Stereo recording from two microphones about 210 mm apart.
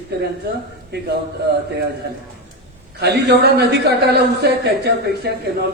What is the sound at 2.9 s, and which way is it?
A man's voice, 50° right (ahead or behind).